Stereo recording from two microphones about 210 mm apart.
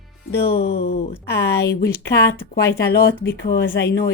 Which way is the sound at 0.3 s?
50° left (ahead or behind).